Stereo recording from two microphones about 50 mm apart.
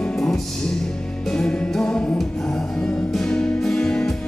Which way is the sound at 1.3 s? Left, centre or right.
Centre.